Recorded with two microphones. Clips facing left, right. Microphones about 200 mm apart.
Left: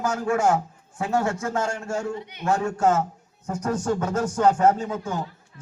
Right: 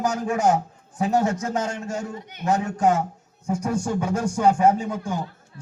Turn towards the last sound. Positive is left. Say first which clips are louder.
# right 1 dB
turn(degrees=-10)  # may be behind; listen again after turning